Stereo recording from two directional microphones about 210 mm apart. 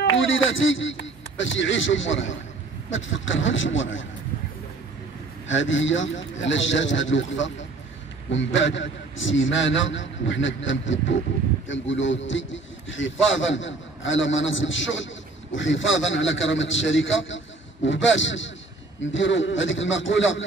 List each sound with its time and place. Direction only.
0.2 s a man's voice: 65° left (ahead or behind)
5.5 s a man's voice: 60° left (ahead or behind)